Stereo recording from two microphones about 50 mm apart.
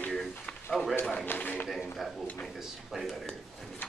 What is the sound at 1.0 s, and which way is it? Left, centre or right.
Speech, left.